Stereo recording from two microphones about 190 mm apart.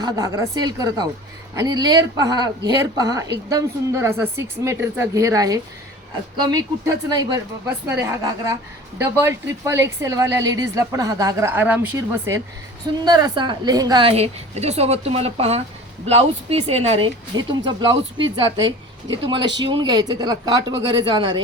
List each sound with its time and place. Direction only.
0.0 s a woman's voice: 20° right (ahead or behind)
17.3 s speech: 20° right (ahead or behind)
19.1 s speech: 25° right (ahead or behind)